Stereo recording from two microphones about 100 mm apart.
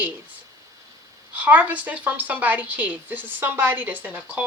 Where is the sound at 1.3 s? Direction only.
15° right (ahead or behind).